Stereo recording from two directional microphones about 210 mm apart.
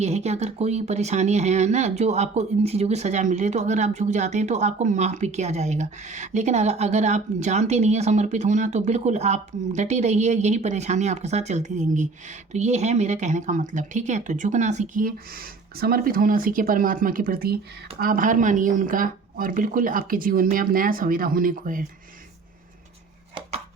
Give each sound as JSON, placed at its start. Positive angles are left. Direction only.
{"t": 0.0, "sound": "speech", "side_deg": -30}